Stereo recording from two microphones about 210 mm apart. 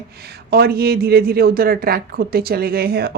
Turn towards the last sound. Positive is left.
turn(degrees=-50)  # may be behind; listen again after turning